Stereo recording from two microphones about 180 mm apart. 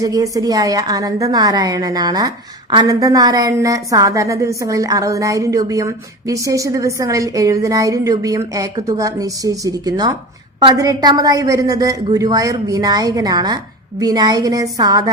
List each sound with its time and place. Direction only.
0.0 s a woman's voice: 20° right (ahead or behind)